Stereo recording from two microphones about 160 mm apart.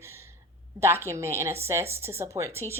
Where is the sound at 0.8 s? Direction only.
15° right (ahead or behind).